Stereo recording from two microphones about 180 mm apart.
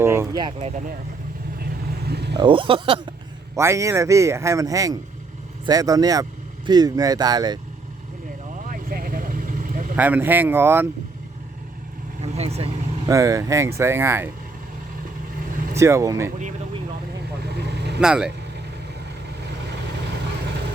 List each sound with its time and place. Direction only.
0.0 s speech: 15° right (ahead or behind)
2.0 s speech: 65° right (ahead or behind)
2.4 s speech: 30° right (ahead or behind)
3.5 s speech: 15° right (ahead or behind)
8.7 s vehicle: 50° right (ahead or behind)
9.9 s speech: 10° right (ahead or behind)
12.2 s speech: 35° right (ahead or behind)
13.1 s speech: 15° right (ahead or behind)
15.7 s speech: 15° right (ahead or behind)
17.4 s vehicle: 70° right (ahead or behind)
18.0 s speech: 5° right (ahead or behind)